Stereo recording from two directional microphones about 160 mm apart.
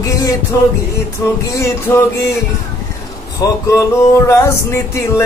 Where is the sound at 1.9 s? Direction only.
15° left (ahead or behind).